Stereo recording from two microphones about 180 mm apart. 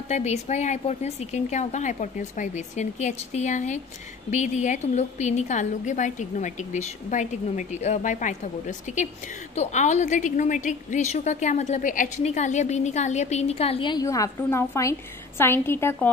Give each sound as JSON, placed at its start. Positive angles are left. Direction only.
{"t": 0.1, "sound": "a woman's voice", "side_deg": 40}